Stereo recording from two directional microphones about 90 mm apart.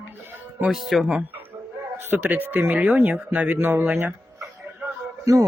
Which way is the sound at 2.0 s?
20° right (ahead or behind).